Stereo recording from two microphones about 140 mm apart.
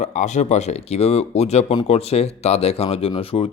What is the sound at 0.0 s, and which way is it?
Speech, 60° left (ahead or behind).